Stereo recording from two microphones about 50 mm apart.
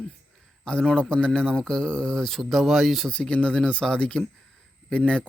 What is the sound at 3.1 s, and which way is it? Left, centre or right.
Speech, left.